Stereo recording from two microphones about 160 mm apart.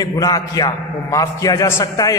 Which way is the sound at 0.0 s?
20° left (ahead or behind).